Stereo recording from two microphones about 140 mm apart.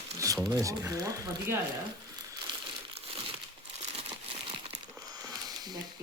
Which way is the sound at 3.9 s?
45° right (ahead or behind).